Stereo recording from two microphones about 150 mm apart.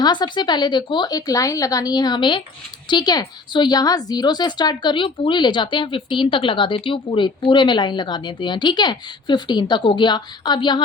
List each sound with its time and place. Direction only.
0.0 s a woman's voice: 30° left (ahead or behind)